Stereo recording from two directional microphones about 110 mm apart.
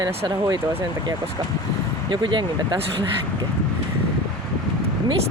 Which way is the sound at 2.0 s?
45° right (ahead or behind).